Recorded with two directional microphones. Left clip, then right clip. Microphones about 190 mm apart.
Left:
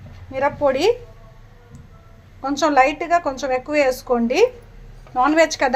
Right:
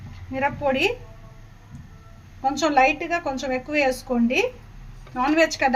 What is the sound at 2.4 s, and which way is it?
A woman's voice, 15° left (ahead or behind).